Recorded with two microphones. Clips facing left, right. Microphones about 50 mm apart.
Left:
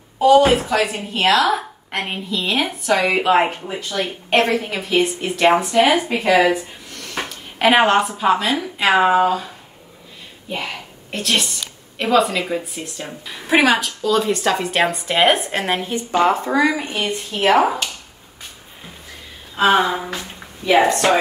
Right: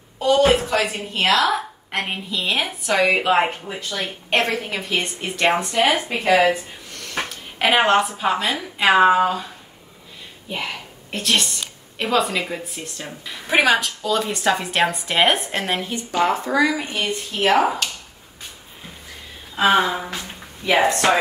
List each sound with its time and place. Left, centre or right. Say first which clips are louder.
0.2 s a woman's voice: left 4 dB; centre
6.2 s a woman's voice: left 1 dB; centre
6.9 s a sound: right 1 dB; centre
8.2 s a woman's voice: left 4 dB; centre
10.5 s a woman's voice: left 1 dB; centre
15.6 s speech: left 3 dB; centre
16.2 s a woman's voice: left 2 dB; left
16.9 s a woman's voice: left 2 dB; centre
19.5 s a woman's voice: left 2 dB; centre